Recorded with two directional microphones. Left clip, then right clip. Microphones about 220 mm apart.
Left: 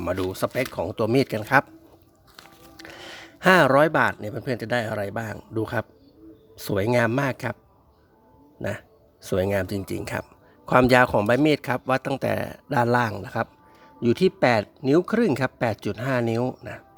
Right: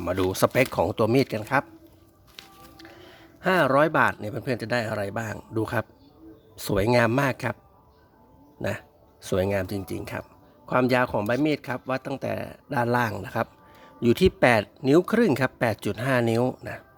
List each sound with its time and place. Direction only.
0.0 s speech: 5° left (ahead or behind)
0.3 s speech: 15° right (ahead or behind)
0.9 s speech: centre (ahead or behind)
2.7 s music: 45° left (ahead or behind)
3.4 s speech: 20° left (ahead or behind); by 7.5 s centre (ahead or behind)
8.6 s speech: centre (ahead or behind)